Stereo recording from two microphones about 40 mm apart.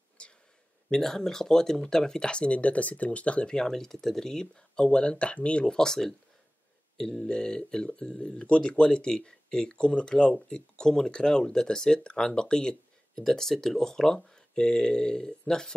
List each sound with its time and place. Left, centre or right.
0.2 s a sound: left
0.8 s speech: centre; by 3.4 s left
3.4 s speech: centre
5.8 s speech: centre